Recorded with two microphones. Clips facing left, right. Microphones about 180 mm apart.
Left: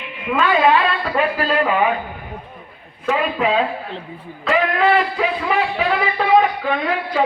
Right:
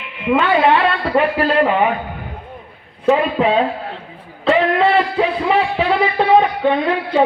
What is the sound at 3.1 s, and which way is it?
Speech, 30° right (ahead or behind).